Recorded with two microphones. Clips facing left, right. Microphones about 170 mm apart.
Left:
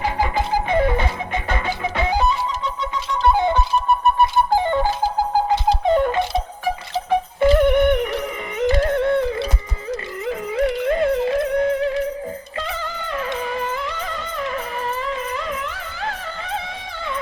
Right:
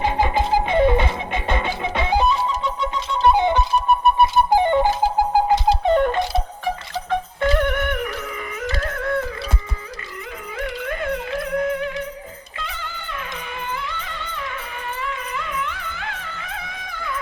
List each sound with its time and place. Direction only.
0.0 s music: 20° right (ahead or behind); by 6.4 s 5° left (ahead or behind)
7.1 s music: 15° left (ahead or behind)
10.6 s music: 30° left (ahead or behind)